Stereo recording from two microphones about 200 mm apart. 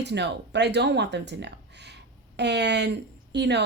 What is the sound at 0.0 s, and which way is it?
Speech, 60° right (ahead or behind).